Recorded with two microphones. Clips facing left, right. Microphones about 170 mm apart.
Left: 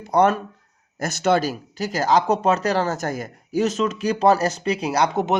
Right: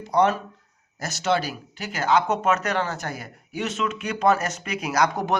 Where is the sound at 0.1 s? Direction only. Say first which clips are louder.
Left 3 dB; 50° left (ahead or behind).